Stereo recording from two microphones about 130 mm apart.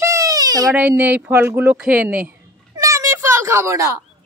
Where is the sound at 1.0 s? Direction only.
10° right (ahead or behind).